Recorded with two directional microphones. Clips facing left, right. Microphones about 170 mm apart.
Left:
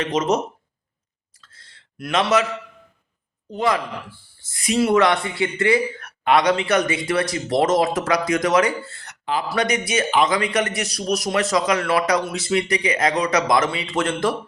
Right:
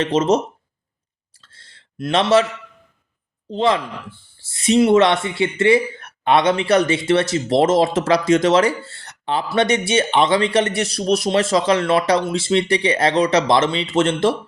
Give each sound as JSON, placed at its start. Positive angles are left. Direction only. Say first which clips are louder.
{"t": 0.0, "sound": "speech", "louder": "right 4 dB", "side_deg": -30}
{"t": 1.4, "sound": "a sound", "louder": "even", "side_deg": -30}
{"t": 3.5, "sound": "speech", "louder": "right 3 dB", "side_deg": -25}